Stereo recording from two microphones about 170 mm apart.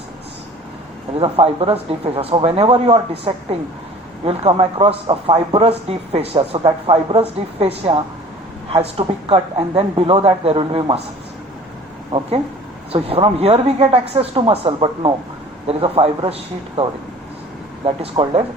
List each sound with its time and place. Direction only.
1.2 s speech: 35° right (ahead or behind)
12.9 s speech: 35° right (ahead or behind)